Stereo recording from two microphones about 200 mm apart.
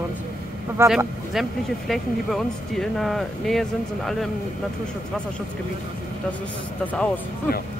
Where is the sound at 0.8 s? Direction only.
Centre (ahead or behind).